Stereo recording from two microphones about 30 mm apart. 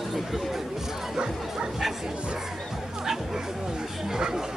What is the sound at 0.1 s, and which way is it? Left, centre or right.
Speech, centre.